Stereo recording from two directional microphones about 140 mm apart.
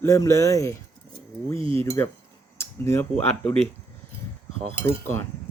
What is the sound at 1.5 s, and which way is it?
Speech, 40° right (ahead or behind).